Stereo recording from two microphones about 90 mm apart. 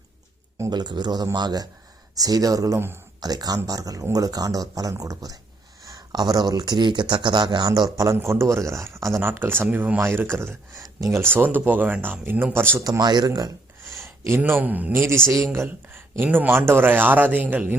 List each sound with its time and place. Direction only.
0.7 s speech: 55° right (ahead or behind)
7.7 s speech: 40° right (ahead or behind); by 10.0 s 15° right (ahead or behind)
10.0 s speech: 25° right (ahead or behind)
12.8 s speech: 45° right (ahead or behind)
14.3 s speech: 25° right (ahead or behind)
16.1 s speech: 20° right (ahead or behind)